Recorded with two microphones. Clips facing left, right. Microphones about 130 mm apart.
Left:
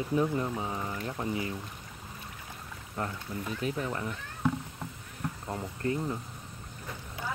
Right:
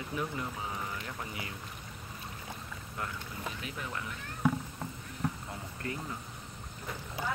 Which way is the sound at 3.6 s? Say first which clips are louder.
Left 7 dB; 35° left (ahead or behind).